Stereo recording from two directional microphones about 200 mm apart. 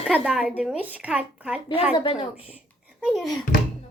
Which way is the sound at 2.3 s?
5° right (ahead or behind).